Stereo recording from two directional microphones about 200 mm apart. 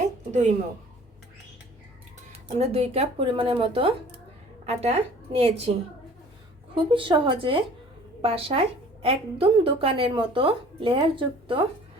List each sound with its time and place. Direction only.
0.0 s a sound: 35° right (ahead or behind)
2.6 s a woman's voice: 30° right (ahead or behind)
6.9 s a woman's voice: 25° right (ahead or behind)